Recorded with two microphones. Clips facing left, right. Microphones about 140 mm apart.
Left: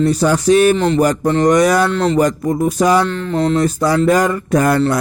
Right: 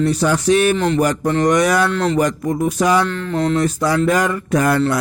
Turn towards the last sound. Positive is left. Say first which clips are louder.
# left 2 dB
turn(degrees=40)  # may be behind; listen again after turning